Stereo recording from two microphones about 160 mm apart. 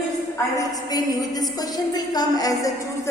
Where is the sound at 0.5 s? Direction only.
20° left (ahead or behind).